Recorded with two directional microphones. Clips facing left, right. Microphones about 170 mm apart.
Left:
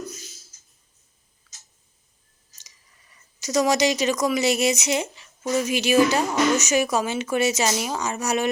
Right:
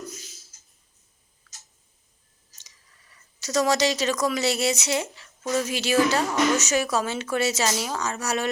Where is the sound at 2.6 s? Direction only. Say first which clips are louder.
Left 1 dB; 15° left (ahead or behind).